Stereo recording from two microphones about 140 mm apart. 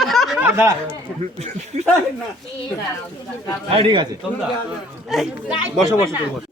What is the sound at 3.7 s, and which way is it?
Speech, 40° right (ahead or behind).